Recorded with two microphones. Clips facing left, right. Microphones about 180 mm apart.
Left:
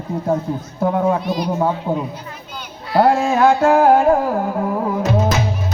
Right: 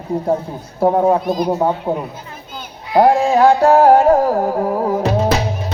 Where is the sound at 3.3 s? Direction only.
35° right (ahead or behind).